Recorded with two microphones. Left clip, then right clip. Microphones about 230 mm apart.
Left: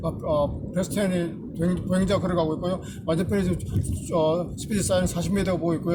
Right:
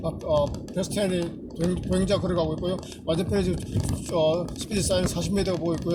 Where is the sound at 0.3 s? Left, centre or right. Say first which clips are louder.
Right 1 dB; centre.